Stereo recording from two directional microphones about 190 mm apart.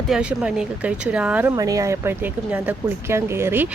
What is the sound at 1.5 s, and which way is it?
Speech, 20° right (ahead or behind).